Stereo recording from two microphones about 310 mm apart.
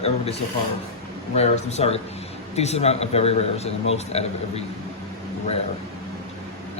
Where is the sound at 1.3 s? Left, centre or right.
Left.